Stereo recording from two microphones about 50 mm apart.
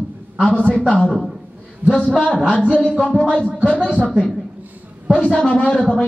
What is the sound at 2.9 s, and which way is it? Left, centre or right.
A man's voice, left.